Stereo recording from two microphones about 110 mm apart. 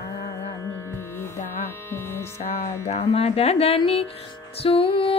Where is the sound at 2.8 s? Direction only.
70° left (ahead or behind).